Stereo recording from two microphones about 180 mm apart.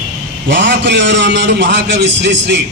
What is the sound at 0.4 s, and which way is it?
A man's voice, 85° right.